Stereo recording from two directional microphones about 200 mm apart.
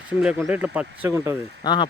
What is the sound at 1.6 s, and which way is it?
Speech, 20° left (ahead or behind).